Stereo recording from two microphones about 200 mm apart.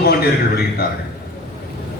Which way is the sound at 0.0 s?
50° left (ahead or behind).